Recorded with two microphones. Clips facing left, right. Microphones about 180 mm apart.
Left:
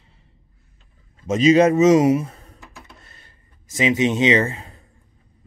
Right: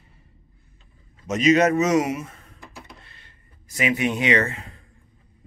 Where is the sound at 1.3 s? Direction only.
30° left (ahead or behind).